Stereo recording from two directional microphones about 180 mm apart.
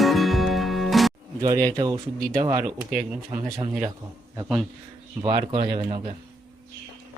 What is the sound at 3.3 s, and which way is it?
Speech, 20° right (ahead or behind).